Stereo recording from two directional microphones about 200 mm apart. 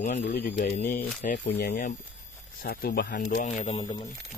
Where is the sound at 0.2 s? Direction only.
50° left (ahead or behind).